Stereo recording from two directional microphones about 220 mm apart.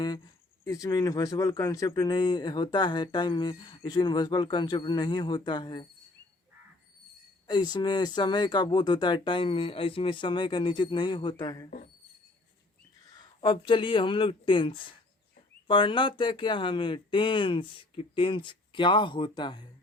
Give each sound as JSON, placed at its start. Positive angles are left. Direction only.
{"t": 0.6, "sound": "speech", "side_deg": 15}
{"t": 7.4, "sound": "speech", "side_deg": 20}
{"t": 13.7, "sound": "speech", "side_deg": 20}